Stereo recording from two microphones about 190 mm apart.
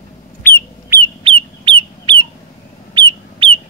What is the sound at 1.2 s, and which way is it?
Bird, 25° right (ahead or behind).